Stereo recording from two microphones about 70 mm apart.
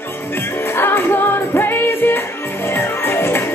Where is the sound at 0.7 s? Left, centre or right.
Left.